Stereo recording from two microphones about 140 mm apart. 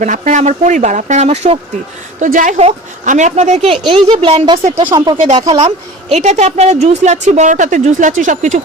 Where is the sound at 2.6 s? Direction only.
55° right (ahead or behind); by 5.1 s 35° right (ahead or behind).